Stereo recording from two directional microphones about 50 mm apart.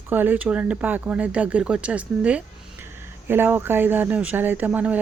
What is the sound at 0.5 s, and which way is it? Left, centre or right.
Speech, right.